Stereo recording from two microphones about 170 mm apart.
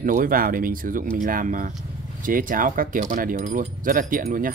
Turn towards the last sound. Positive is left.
turn(degrees=-55)  # may be behind; listen again after turning